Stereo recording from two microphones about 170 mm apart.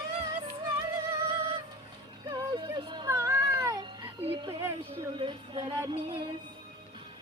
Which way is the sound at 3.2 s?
20° right (ahead or behind).